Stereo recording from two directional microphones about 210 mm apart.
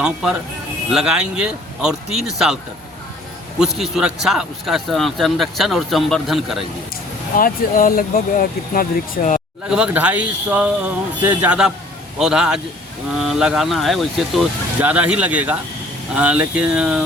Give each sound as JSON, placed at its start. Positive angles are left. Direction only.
{"t": 0.0, "sound": "speech", "side_deg": -5}
{"t": 3.8, "sound": "speech", "side_deg": 0}
{"t": 7.3, "sound": "speech", "side_deg": 40}
{"t": 9.6, "sound": "speech", "side_deg": -5}